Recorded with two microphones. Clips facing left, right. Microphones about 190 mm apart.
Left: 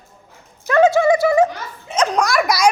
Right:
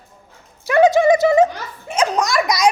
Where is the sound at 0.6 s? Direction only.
15° right (ahead or behind).